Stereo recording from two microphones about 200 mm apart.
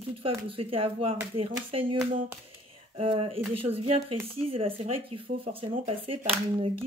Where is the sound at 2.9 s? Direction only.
30° right (ahead or behind).